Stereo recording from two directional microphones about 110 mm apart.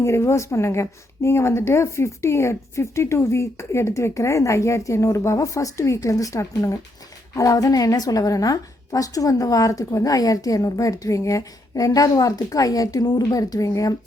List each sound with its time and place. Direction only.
0.0 s a woman's voice: 25° left (ahead or behind)